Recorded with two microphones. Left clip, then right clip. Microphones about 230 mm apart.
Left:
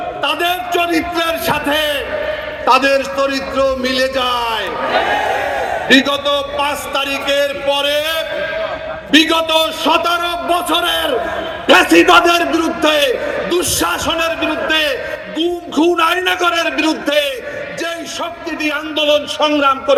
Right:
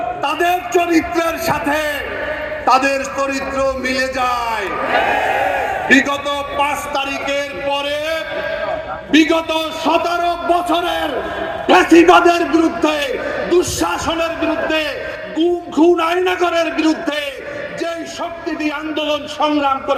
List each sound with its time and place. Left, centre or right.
0.3 s a man's voice: left
5.9 s a sound: left
6.7 s a man's voice: left
18.6 s a man's voice: left